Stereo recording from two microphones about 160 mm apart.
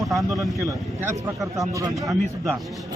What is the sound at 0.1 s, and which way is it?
Speech, centre (ahead or behind).